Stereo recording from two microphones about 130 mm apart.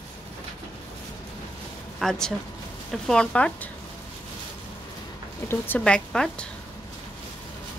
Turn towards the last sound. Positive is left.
turn(degrees=5)  # may be behind; listen again after turning